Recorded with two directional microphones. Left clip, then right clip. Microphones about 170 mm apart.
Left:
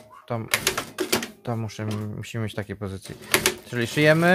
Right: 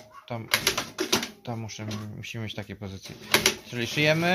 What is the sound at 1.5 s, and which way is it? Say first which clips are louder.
Speech: left 5 dB; 50° left (ahead or behind).